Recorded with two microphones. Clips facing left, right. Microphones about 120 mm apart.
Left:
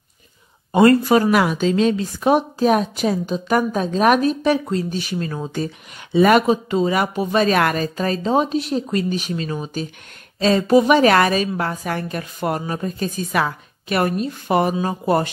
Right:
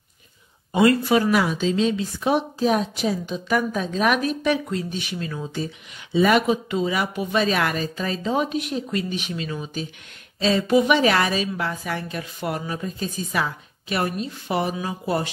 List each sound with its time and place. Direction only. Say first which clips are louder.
0.7 s a woman's voice: left 4 dB; 45° left (ahead or behind)
1.3 s a woman's voice: left 4 dB; 60° left (ahead or behind)
3.3 s a woman's voice: left 4 dB; 40° left (ahead or behind)
6.4 s a woman's voice: left 4 dB; 40° left (ahead or behind)
8.2 s a woman's voice: left 4 dB; 35° left (ahead or behind); by 15.3 s 50° left (ahead or behind)